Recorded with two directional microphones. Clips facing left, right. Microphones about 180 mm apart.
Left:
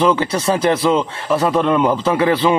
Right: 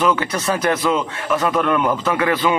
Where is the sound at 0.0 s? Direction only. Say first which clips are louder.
Left 3 dB; 25° left (ahead or behind).